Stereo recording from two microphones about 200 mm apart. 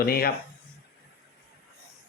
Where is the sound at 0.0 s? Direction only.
50° left (ahead or behind).